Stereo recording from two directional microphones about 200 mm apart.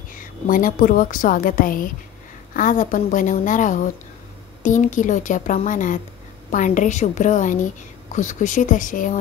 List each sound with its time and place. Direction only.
0.5 s a woman's voice: 40° left (ahead or behind)